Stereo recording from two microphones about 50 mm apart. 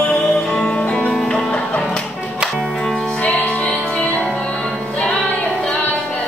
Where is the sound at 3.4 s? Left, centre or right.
Left.